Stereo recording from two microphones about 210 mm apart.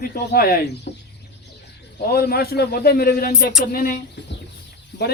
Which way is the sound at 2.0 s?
50° left (ahead or behind).